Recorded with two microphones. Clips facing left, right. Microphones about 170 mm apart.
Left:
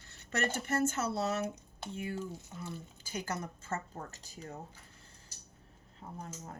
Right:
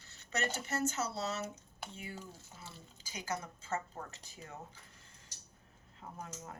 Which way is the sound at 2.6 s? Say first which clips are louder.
Left 8 dB; 50° left (ahead or behind).